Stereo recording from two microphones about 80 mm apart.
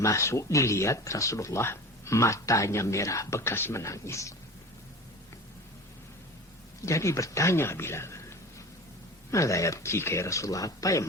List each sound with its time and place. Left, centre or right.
0.0 s speech: left
6.8 s speech: left
9.3 s speech: left